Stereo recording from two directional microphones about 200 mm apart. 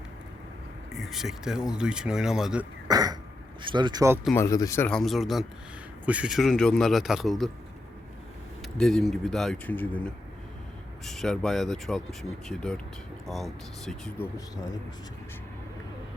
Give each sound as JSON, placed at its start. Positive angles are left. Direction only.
{"t": 0.9, "sound": "speech", "side_deg": 0}
{"t": 2.8, "sound": "speech", "side_deg": -20}
{"t": 4.4, "sound": "speech", "side_deg": 15}
{"t": 8.6, "sound": "speech", "side_deg": 0}